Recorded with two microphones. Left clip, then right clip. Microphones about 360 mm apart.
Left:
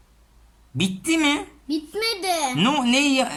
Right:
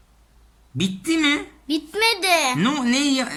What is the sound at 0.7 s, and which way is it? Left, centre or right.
Speech, centre.